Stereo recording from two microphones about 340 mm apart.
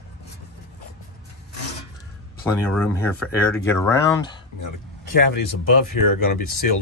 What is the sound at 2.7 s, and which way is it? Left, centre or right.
Speech, centre.